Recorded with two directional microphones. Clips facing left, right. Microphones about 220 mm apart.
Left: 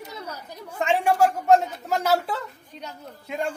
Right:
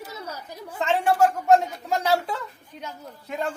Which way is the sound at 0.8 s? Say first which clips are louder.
Even; 10° left (ahead or behind).